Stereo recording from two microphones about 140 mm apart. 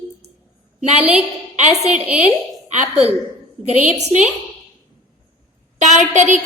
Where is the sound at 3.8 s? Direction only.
55° right (ahead or behind).